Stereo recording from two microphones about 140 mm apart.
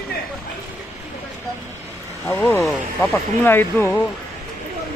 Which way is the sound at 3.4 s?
15° left (ahead or behind).